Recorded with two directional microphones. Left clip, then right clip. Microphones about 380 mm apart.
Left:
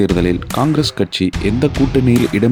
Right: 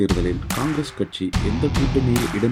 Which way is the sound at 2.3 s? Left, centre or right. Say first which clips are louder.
Left 7 dB; left.